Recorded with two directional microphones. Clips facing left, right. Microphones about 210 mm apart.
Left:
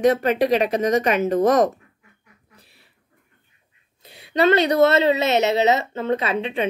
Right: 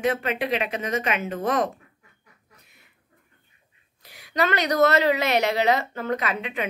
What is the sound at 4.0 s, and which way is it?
Speech, 25° left (ahead or behind).